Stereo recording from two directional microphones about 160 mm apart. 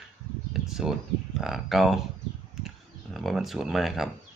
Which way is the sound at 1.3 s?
Centre (ahead or behind).